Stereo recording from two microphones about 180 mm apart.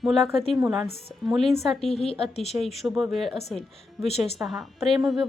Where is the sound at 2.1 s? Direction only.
35° left (ahead or behind).